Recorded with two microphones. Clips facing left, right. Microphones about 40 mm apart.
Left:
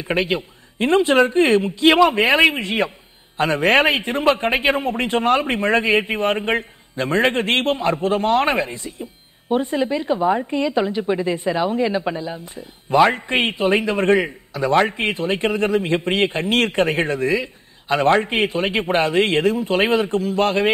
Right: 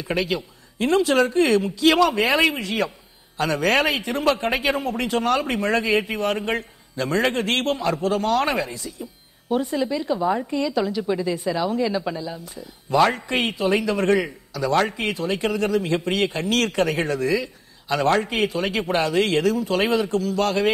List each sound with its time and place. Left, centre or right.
0.0 s a man's voice: left